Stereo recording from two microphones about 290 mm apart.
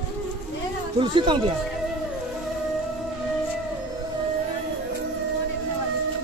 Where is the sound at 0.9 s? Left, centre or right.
Centre.